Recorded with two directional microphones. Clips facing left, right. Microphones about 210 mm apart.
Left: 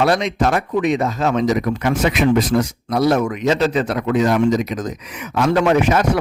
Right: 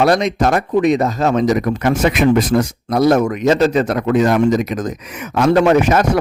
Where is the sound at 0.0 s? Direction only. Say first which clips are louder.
Right 3 dB; 40° right (ahead or behind).